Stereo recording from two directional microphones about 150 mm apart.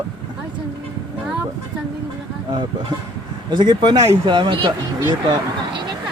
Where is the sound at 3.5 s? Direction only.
30° right (ahead or behind).